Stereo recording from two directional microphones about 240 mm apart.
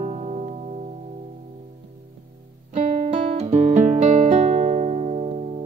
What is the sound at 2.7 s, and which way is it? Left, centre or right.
Guitar, right.